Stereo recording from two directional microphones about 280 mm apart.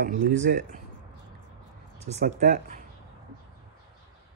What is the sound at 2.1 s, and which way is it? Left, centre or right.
Speech, right.